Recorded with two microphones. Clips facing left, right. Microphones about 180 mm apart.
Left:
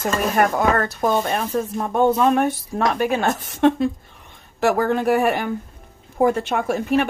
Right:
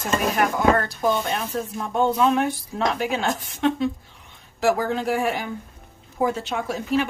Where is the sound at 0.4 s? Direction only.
50° left (ahead or behind).